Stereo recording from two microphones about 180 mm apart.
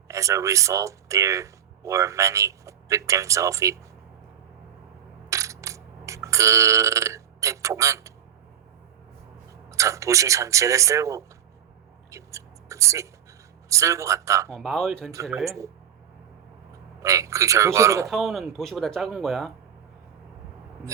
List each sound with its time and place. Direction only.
0.1 s speech: 15° right (ahead or behind)
5.3 s a sound: 15° right (ahead or behind)
9.6 s speech: 15° right (ahead or behind)
12.1 s a sound: 15° right (ahead or behind)
13.7 s speech: 15° right (ahead or behind)
14.5 s speech: centre (ahead or behind)
15.4 s speech: 15° right (ahead or behind)
17.0 s speech: 15° right (ahead or behind)
18.1 s speech: centre (ahead or behind)